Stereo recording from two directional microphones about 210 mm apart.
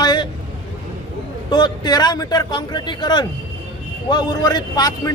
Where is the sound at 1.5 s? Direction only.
20° left (ahead or behind).